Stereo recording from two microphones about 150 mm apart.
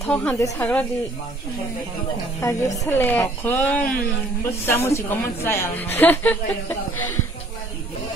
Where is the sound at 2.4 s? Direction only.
20° left (ahead or behind).